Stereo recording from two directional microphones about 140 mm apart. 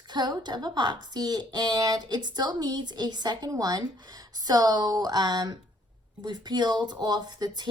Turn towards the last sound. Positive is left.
turn(degrees=-30)  # may be behind; listen again after turning